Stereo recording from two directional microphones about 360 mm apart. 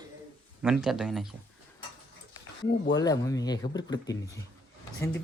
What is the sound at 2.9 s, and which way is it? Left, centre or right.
Speech, centre.